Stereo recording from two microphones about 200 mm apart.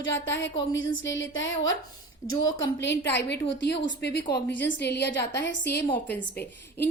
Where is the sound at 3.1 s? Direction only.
60° left (ahead or behind).